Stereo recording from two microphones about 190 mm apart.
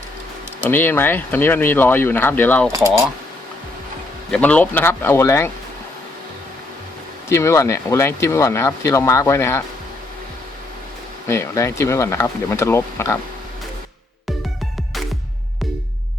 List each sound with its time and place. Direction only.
0.7 s speech: 10° left (ahead or behind)
4.3 s speech: 5° left (ahead or behind)
7.3 s speech: 15° left (ahead or behind)
11.3 s speech: 15° left (ahead or behind)